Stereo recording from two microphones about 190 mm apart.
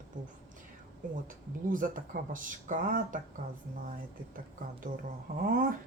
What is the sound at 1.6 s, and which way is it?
Speech, 45° right (ahead or behind).